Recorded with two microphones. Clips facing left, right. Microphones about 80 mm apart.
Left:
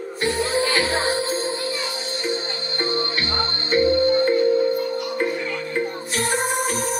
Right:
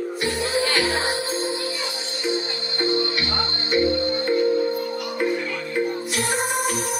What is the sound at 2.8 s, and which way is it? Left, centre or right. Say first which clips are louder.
Music: right 2 dB; left.